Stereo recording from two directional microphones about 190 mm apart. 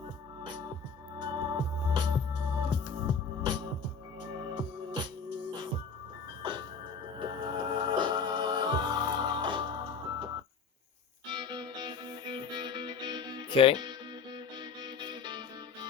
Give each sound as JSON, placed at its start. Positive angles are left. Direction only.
{"t": 0.4, "sound": "music", "side_deg": -25}
{"t": 6.4, "sound": "music", "side_deg": -25}
{"t": 11.3, "sound": "music", "side_deg": -25}
{"t": 13.5, "sound": "speech", "side_deg": 30}
{"t": 14.3, "sound": "music", "side_deg": -25}